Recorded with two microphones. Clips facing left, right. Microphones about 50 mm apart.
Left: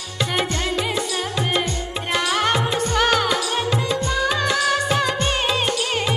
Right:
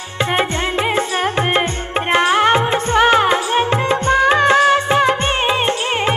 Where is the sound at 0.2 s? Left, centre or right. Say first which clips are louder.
Right 5 dB; right.